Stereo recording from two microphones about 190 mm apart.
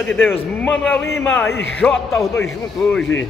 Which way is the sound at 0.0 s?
10° left (ahead or behind).